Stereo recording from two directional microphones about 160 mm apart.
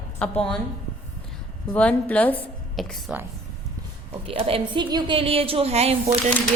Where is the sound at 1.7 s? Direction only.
10° left (ahead or behind).